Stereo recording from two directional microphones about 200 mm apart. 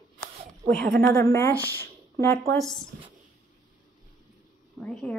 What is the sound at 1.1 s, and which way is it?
Speech, 15° left (ahead or behind).